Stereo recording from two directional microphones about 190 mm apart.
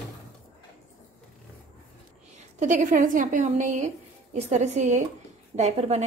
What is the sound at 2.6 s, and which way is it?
A woman's voice, 45° right (ahead or behind).